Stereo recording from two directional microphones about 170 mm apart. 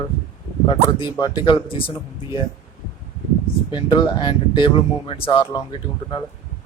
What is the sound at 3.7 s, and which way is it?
Speech, 30° left (ahead or behind).